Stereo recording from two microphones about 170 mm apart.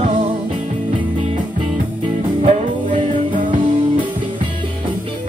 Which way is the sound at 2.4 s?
45° right (ahead or behind).